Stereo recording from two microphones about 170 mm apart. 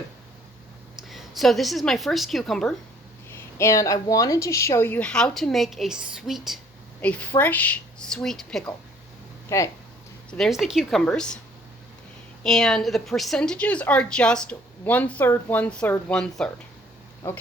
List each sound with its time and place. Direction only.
1.0 s a woman's voice: centre (ahead or behind)
3.2 s speech: 15° left (ahead or behind); by 6.6 s centre (ahead or behind)
7.0 s speech: 10° left (ahead or behind)
9.5 s speech: 20° left (ahead or behind)
10.3 s a woman's voice: centre (ahead or behind)
12.4 s a woman's voice: 5° left (ahead or behind)